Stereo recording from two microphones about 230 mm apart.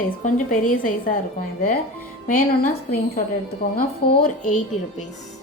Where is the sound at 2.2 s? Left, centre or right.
Left.